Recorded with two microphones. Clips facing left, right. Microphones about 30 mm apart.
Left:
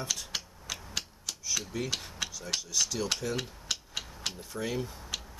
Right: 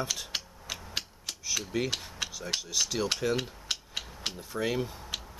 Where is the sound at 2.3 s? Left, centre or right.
Centre.